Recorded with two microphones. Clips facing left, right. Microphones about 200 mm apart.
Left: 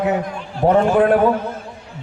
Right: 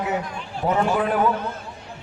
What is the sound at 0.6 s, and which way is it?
Speech, 60° left (ahead or behind).